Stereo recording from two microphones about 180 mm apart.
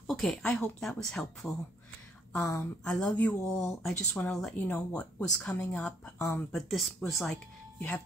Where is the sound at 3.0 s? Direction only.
10° left (ahead or behind).